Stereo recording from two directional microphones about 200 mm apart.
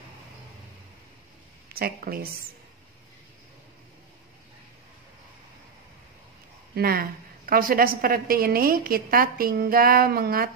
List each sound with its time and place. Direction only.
1.7 s a woman's voice: 50° right (ahead or behind)
6.7 s a woman's voice: 50° right (ahead or behind)